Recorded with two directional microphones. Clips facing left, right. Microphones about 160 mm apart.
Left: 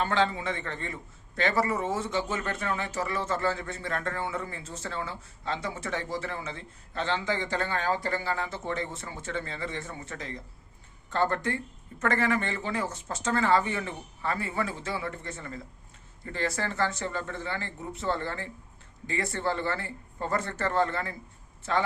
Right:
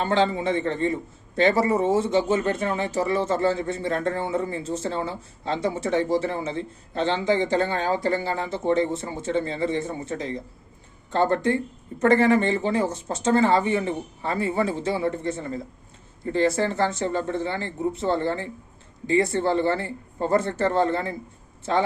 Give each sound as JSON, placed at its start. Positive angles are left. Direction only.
{"t": 0.0, "sound": "speech", "side_deg": -25}